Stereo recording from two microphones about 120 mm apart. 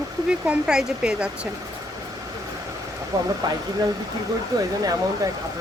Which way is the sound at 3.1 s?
30° right (ahead or behind).